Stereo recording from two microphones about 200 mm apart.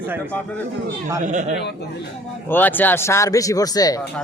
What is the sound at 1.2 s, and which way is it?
Speech, 40° right (ahead or behind).